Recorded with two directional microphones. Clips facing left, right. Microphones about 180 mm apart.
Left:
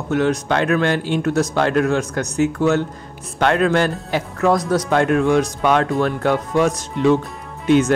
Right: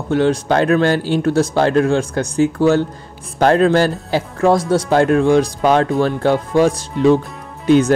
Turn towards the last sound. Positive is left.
turn(degrees=-35)  # may be behind; listen again after turning